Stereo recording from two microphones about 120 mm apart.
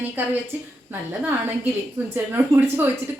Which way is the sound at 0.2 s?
15° right (ahead or behind).